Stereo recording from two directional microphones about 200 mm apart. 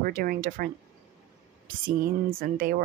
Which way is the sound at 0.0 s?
45° right (ahead or behind).